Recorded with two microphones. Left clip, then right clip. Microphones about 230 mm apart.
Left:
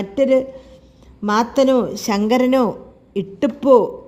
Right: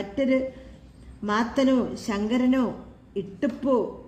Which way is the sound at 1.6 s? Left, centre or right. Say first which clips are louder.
Left 8 dB; left.